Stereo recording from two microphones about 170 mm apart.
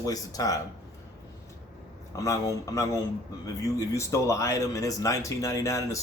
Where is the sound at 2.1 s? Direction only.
20° left (ahead or behind).